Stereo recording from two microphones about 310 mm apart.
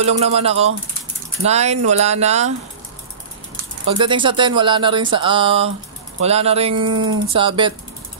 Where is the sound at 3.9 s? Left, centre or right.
Centre.